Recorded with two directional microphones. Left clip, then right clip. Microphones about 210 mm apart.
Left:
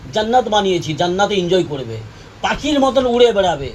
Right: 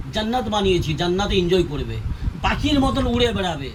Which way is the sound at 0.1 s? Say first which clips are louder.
Left 8 dB; 20° right (ahead or behind).